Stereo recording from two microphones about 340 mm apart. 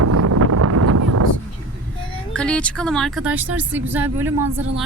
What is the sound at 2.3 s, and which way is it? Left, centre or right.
Speech, centre.